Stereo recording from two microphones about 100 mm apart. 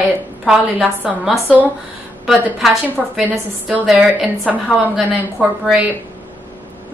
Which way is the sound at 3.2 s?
15° right (ahead or behind).